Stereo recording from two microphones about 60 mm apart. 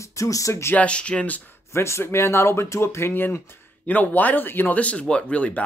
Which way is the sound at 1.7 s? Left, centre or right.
Left.